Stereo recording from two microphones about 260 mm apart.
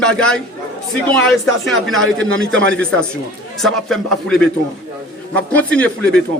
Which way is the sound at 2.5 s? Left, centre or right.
Right.